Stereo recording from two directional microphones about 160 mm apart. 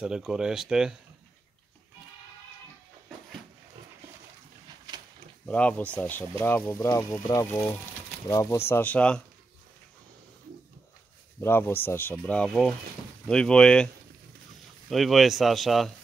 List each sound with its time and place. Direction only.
0.0 s speech: 5° right (ahead or behind)
5.5 s speech: 10° left (ahead or behind)
11.4 s speech: 15° left (ahead or behind)
14.9 s speech: centre (ahead or behind)